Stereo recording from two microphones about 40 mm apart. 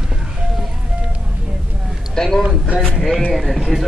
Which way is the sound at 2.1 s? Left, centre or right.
Centre.